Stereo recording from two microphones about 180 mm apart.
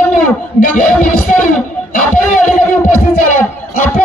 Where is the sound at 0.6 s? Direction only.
50° left (ahead or behind).